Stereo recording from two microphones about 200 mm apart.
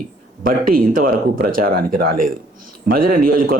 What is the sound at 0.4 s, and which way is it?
Speech, 45° right (ahead or behind).